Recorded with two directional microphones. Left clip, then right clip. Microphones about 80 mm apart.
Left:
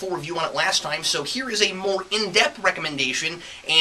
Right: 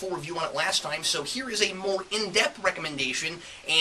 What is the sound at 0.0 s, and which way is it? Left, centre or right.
Speech, centre.